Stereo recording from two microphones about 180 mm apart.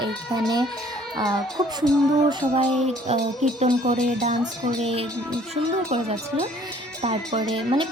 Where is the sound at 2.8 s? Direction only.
40° right (ahead or behind).